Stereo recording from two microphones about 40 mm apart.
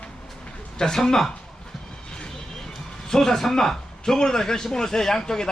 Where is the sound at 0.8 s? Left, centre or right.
Centre.